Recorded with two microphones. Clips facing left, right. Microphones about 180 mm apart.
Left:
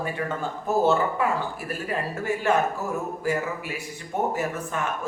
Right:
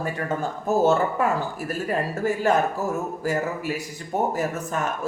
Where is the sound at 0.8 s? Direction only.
45° right (ahead or behind).